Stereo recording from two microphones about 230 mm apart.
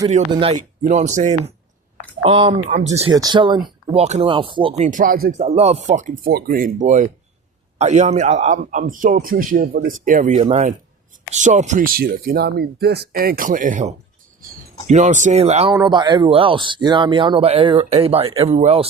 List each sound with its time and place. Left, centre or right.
0.3 s speech: centre
0.8 s a man's voice: right
4.9 s a man's voice: right
5.4 s a man's voice: right